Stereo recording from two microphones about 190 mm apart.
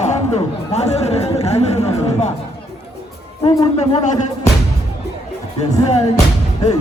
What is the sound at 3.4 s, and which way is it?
Speech, 35° left (ahead or behind).